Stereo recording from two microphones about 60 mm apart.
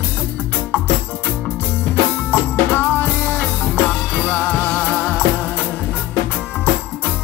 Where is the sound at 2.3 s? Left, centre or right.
Left.